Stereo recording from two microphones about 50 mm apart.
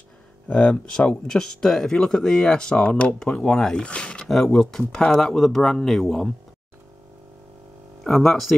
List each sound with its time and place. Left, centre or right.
0.5 s speech: left
0.9 s speech: centre
2.8 s speech: left
3.2 s speech: centre
4.6 s speech: centre
8.0 s speech: centre